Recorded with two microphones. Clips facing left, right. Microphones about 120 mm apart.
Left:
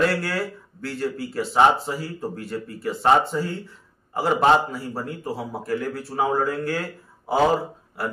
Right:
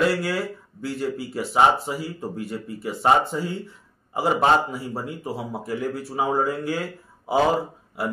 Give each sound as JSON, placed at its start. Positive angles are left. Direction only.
{"t": 0.1, "sound": "speech", "side_deg": -20}